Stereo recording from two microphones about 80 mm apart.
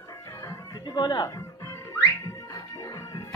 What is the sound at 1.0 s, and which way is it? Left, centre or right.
Speech, left.